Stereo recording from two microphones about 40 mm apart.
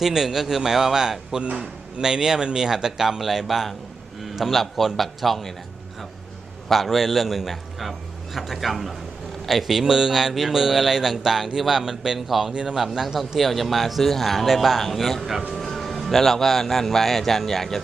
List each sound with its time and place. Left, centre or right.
0.0 s a sound: centre
1.4 s speech: right
2.0 s a sound: centre
4.9 s a man's voice: centre
6.7 s a man's voice: centre
9.8 s a sound: centre
12.3 s a man's voice: centre
12.5 s a man's voice: centre
13.1 s a man's voice: centre